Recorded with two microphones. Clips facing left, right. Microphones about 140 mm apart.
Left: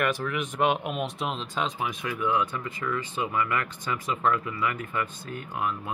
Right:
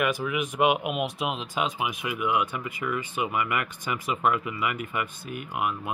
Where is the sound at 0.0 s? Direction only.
5° right (ahead or behind).